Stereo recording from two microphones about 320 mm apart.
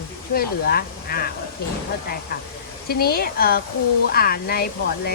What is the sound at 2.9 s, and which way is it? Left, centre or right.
Speech, left.